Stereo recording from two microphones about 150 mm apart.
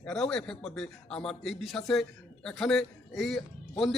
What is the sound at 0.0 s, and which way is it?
A man's voice, 5° left (ahead or behind).